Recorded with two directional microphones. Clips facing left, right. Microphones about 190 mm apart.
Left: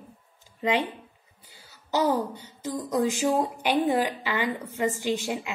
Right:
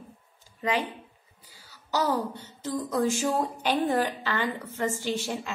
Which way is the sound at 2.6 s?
15° left (ahead or behind).